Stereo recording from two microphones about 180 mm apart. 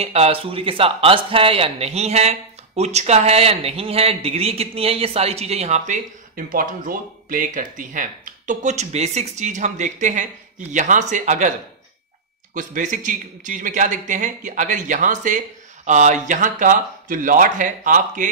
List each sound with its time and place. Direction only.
0.0 s a man's voice: 35° right (ahead or behind)
12.5 s speech: 45° right (ahead or behind)